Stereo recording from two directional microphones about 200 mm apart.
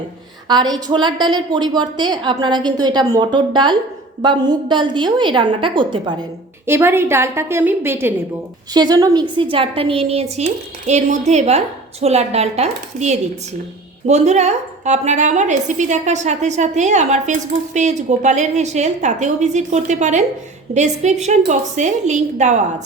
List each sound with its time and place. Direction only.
0.4 s a woman's voice: 20° right (ahead or behind)
6.7 s a woman's voice: 10° right (ahead or behind); by 22.6 s 35° right (ahead or behind)